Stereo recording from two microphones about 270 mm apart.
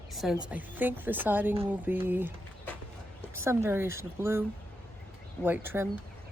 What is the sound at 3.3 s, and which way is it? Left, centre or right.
Speech, centre.